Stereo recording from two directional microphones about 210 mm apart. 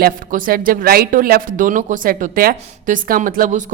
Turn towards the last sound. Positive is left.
turn(degrees=-35)  # may be behind; listen again after turning